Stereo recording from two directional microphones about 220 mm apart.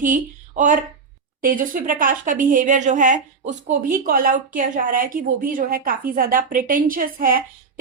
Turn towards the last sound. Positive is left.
turn(degrees=-40)  # may be behind; listen again after turning